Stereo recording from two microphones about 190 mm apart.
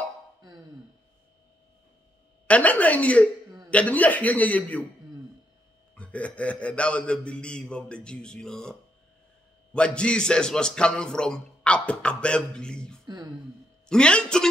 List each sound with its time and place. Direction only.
2.4 s a man's voice: 5° left (ahead or behind)
5.9 s a man's voice: 5° left (ahead or behind)
9.8 s a man's voice: 5° left (ahead or behind)
13.0 s a sound: 20° right (ahead or behind)
13.8 s a man's voice: 5° left (ahead or behind)